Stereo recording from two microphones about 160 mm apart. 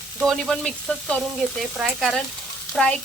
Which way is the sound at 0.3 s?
5° left (ahead or behind).